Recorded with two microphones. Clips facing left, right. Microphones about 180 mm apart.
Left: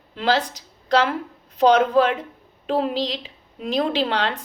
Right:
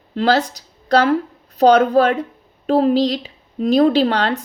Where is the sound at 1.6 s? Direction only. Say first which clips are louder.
Right 4 dB; 40° right (ahead or behind).